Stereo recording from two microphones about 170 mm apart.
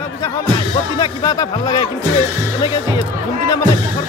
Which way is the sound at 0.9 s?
25° left (ahead or behind).